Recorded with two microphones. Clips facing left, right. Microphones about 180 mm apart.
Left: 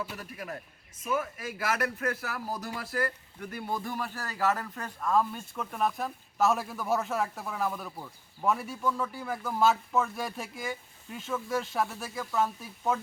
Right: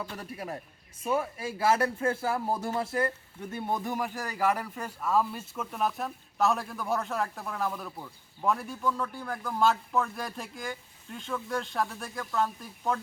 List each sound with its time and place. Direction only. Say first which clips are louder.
0.2 s a man's voice: right 2 dB; 30° right (ahead or behind); by 13.0 s 5° left (ahead or behind)